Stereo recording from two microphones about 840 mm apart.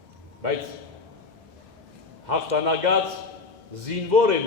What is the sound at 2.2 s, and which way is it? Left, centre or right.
A man's voice, right.